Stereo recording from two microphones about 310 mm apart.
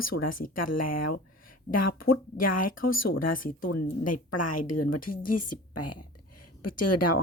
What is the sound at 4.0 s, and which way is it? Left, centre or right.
A woman's voice, left.